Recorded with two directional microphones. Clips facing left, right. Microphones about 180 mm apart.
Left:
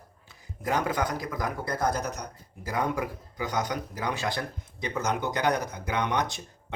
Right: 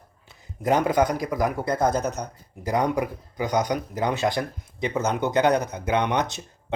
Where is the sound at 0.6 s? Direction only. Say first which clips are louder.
Right 7 dB; 20° right (ahead or behind).